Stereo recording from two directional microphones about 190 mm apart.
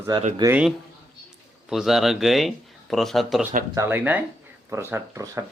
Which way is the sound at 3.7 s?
10° right (ahead or behind).